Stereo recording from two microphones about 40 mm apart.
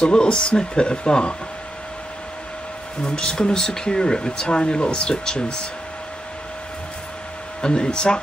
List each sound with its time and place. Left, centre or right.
0.0 s speech: left
3.2 s speech: centre
7.6 s speech: left